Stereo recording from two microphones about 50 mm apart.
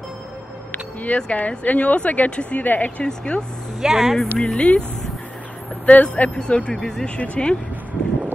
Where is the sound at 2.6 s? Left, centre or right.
Left.